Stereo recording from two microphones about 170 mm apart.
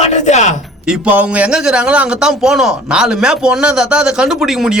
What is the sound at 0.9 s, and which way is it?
A man's voice, 5° right (ahead or behind).